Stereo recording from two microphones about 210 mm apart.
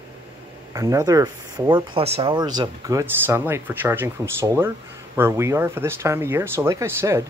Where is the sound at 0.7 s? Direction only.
15° right (ahead or behind).